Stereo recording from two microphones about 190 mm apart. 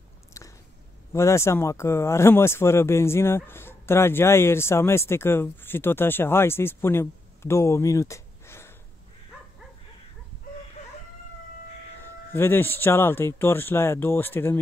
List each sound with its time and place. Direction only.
0.3 s a sound: 15° left (ahead or behind)
1.1 s speech: 15° left (ahead or behind)
12.0 s speech: 10° left (ahead or behind)